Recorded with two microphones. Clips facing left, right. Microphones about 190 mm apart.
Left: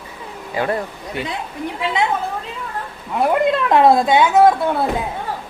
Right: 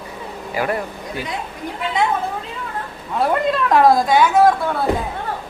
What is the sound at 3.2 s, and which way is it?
A woman's voice, 20° left (ahead or behind).